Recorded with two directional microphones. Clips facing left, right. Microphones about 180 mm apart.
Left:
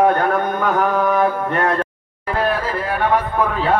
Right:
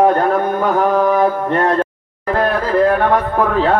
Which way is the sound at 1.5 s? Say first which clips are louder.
Right 4 dB; 30° right (ahead or behind).